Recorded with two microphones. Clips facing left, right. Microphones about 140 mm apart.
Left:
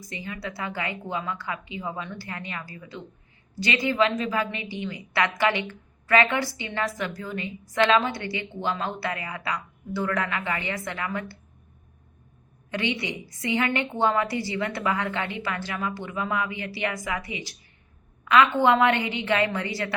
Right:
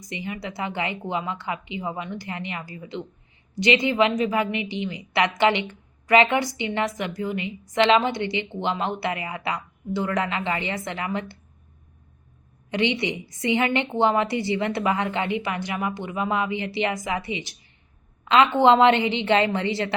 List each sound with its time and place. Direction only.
0.1 s a woman's voice: 20° right (ahead or behind)
12.7 s a woman's voice: 20° right (ahead or behind)